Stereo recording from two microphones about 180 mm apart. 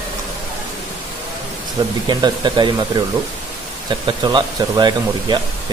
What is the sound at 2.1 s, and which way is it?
Speech, 25° right (ahead or behind).